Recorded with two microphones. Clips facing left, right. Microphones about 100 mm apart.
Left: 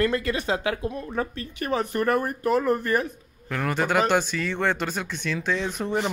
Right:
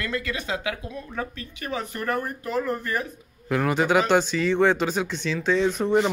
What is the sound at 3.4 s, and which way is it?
Speech, 5° right (ahead or behind).